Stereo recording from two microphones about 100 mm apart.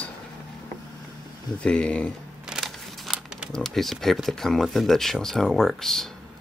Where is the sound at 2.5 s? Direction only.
5° right (ahead or behind).